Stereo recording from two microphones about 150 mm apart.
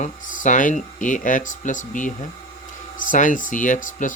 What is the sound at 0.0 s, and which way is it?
Speech, 60° left (ahead or behind).